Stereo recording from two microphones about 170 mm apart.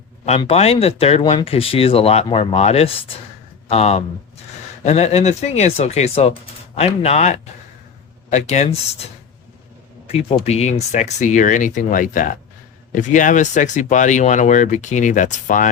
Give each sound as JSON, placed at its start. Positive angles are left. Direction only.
{"t": 0.3, "sound": "speech", "side_deg": 35}
{"t": 10.1, "sound": "speech", "side_deg": 35}